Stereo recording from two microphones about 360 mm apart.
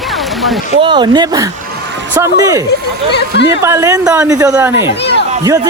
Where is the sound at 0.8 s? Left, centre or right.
Centre.